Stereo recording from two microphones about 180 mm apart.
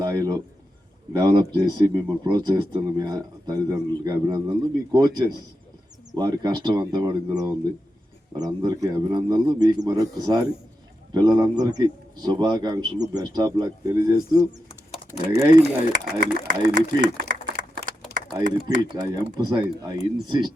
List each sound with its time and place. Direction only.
0.0 s a sound: 20° right (ahead or behind)
1.1 s speech: 25° right (ahead or behind)
15.6 s speech: 45° right (ahead or behind)
18.8 s speech: 25° right (ahead or behind)